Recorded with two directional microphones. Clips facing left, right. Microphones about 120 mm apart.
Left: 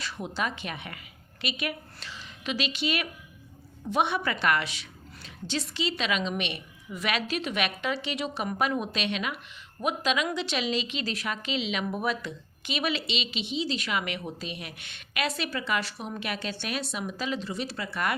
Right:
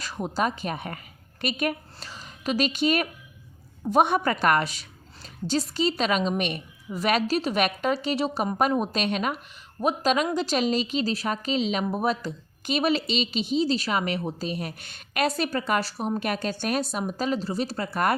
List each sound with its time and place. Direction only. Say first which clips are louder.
0.0 s a woman's voice: right 5 dB; 40° right (ahead or behind)